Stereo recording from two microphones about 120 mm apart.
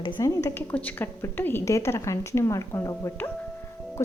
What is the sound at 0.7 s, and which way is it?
Speech, 15° left (ahead or behind).